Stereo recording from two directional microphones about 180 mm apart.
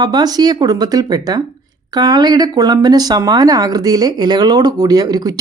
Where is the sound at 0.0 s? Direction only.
20° right (ahead or behind).